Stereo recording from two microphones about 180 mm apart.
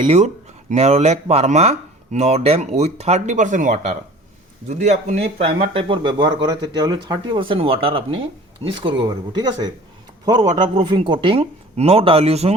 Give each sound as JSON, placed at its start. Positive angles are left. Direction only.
{"t": 0.0, "sound": "speech", "side_deg": -35}